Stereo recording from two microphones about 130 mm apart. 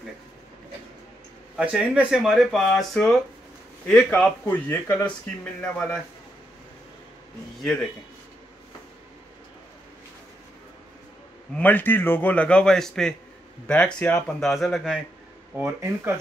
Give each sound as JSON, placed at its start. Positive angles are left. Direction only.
{"t": 1.6, "sound": "speech", "side_deg": -10}
{"t": 11.5, "sound": "speech", "side_deg": 15}
{"t": 15.5, "sound": "speech", "side_deg": -15}